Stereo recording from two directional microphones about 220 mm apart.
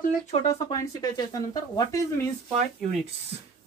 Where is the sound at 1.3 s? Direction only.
15° left (ahead or behind).